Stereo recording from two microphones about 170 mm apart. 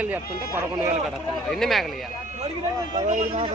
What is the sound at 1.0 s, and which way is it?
Speech, centre (ahead or behind).